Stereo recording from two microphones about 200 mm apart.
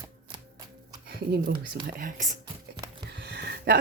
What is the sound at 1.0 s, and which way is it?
Speech, 50° right (ahead or behind).